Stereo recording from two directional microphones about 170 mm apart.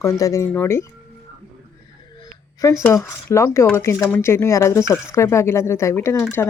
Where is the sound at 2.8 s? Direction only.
15° left (ahead or behind).